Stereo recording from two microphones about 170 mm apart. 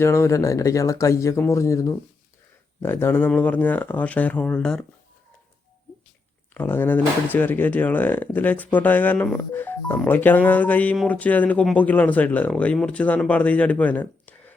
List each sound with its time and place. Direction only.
0.0 s speech: 15° left (ahead or behind)
6.5 s speech: 10° left (ahead or behind)